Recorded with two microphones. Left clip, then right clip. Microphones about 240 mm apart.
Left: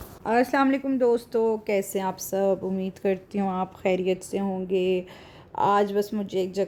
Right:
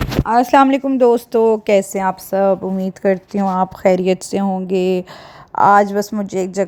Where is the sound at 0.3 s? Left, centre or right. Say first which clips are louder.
Right 11 dB; right.